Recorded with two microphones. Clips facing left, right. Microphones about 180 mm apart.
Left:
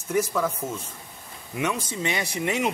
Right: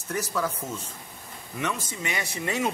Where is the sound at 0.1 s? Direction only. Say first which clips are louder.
Left 4 dB; 10° left (ahead or behind).